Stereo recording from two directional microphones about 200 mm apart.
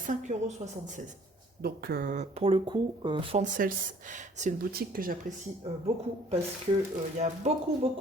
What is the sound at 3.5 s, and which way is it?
Speech, 40° right (ahead or behind).